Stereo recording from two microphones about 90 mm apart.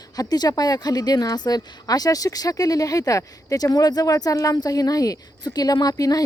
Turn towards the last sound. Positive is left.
turn(degrees=45)  # may be behind; listen again after turning